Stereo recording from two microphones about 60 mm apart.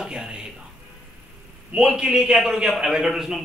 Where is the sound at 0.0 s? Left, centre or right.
Centre.